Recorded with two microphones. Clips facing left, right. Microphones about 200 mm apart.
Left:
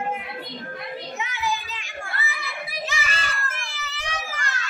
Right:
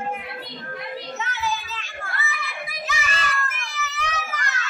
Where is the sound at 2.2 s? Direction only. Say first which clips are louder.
Right 2 dB; 30° left (ahead or behind).